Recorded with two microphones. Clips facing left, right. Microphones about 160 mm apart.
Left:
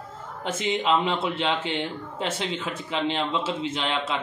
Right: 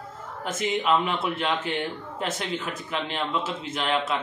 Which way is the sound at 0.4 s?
25° left (ahead or behind).